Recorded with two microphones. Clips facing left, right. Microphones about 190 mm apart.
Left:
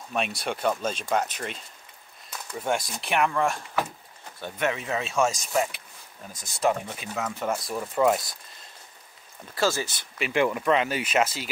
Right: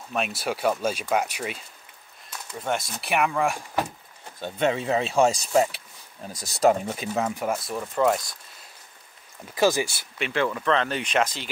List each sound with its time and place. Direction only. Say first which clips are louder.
0.1 s speech: right 1 dB; centre (ahead or behind)
2.6 s speech: left 1 dB; 5° left (ahead or behind)
3.0 s speech: right 2 dB; 5° right (ahead or behind)
4.4 s speech: right 4 dB; 25° right (ahead or behind); by 7.2 s 40° right (ahead or behind)
7.3 s speech: right 1 dB; 5° right (ahead or behind)
9.6 s speech: right 4 dB; 15° right (ahead or behind)
10.3 s speech: left 1 dB; 15° left (ahead or behind)